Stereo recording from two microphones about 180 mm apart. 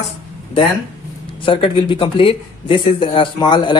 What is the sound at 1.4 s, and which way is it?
Speech, 30° left (ahead or behind).